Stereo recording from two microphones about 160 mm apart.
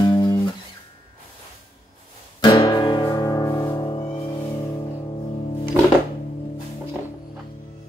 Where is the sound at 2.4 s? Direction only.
25° left (ahead or behind).